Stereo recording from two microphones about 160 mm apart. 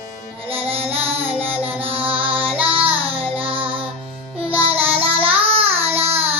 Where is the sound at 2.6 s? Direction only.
35° right (ahead or behind).